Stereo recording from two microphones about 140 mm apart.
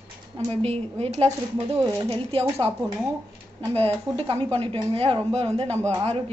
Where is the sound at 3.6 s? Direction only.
45° right (ahead or behind).